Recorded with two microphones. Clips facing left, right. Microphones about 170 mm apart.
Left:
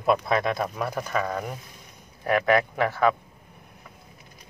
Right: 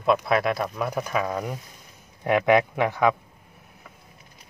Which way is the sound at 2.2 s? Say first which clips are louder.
Right 2 dB; 20° right (ahead or behind).